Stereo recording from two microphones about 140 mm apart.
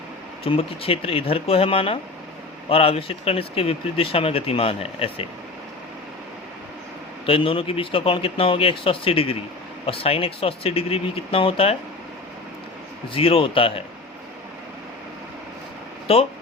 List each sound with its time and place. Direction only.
0.4 s speech: 40° left (ahead or behind)
7.3 s speech: 40° left (ahead or behind)
13.1 s speech: 40° left (ahead or behind)
16.1 s speech: 40° left (ahead or behind)